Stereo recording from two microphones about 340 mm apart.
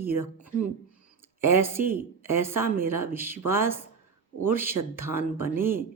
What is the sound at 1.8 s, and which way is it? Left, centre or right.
Speech, right.